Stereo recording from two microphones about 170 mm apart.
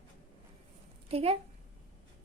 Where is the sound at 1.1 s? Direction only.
35° right (ahead or behind).